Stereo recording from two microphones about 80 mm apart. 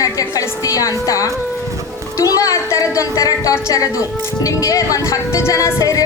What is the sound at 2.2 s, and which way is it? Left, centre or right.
A woman's voice, left.